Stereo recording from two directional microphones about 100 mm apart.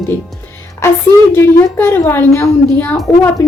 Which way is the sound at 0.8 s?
30° left (ahead or behind).